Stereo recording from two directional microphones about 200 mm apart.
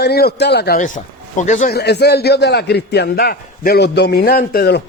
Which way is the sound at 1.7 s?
55° left (ahead or behind).